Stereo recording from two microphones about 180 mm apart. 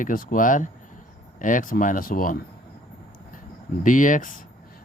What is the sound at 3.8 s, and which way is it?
Speech, 45° left (ahead or behind).